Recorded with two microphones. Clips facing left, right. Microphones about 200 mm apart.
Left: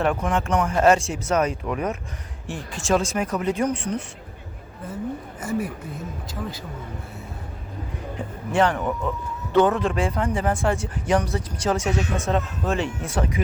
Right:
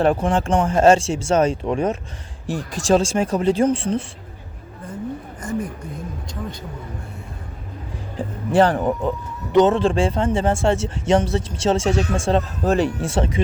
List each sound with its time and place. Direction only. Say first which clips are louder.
0.0 s speech: right 5 dB; 30° right (ahead or behind)
5.4 s speech: even; 5° left (ahead or behind)
8.2 s music: right 7 dB; 35° right (ahead or behind)
8.5 s a man's voice: right 5 dB; 35° right (ahead or behind)
9.5 s speech: right 4 dB; 20° right (ahead or behind)